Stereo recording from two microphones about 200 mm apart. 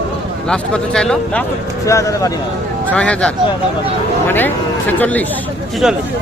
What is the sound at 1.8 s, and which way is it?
Speech, 15° left (ahead or behind).